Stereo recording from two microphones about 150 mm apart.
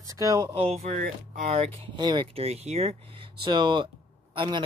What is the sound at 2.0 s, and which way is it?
Speech, 30° right (ahead or behind).